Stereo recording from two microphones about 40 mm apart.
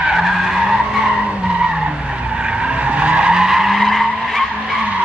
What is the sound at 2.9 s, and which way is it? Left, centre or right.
Skidding, right.